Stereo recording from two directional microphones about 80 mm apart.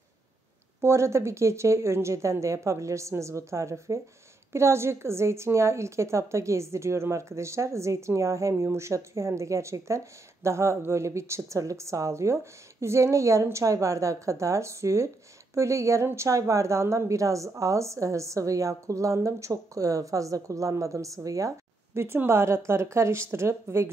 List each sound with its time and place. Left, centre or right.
0.7 s a woman's voice: right
22.0 s a woman's voice: right